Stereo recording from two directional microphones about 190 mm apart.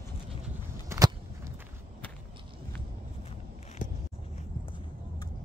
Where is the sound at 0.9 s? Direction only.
15° right (ahead or behind).